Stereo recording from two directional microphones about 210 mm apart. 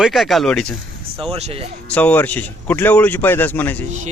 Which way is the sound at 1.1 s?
25° right (ahead or behind).